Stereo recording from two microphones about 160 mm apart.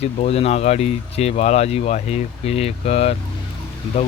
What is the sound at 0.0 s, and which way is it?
Speech, 40° left (ahead or behind).